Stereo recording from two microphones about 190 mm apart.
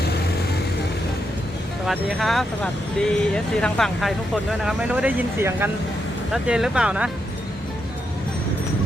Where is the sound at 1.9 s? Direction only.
Centre (ahead or behind).